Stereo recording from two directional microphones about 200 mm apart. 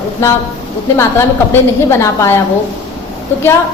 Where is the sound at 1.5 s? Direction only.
15° left (ahead or behind).